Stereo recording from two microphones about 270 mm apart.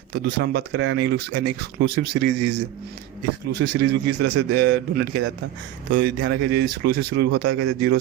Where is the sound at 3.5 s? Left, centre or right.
Right.